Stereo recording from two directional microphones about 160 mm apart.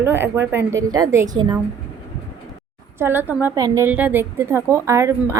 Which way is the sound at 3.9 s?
10° right (ahead or behind).